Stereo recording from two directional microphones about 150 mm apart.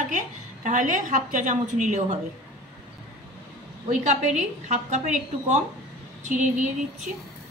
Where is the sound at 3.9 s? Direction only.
55° right (ahead or behind).